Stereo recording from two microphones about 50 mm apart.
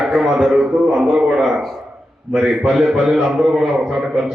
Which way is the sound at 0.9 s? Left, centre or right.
Centre.